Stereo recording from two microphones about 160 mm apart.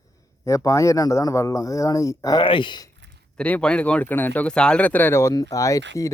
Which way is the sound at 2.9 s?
90° right.